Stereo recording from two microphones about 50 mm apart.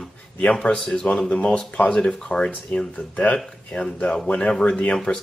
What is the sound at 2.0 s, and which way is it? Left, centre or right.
Speech, centre.